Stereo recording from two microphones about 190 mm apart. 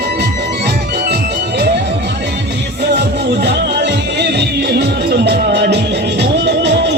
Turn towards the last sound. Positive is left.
turn(degrees=-65)  # may be behind; listen again after turning